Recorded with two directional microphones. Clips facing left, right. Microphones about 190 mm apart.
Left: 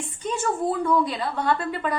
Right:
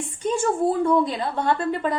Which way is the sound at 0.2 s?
30° right (ahead or behind).